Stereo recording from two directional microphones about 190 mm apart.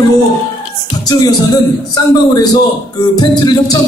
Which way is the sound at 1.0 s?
20° left (ahead or behind).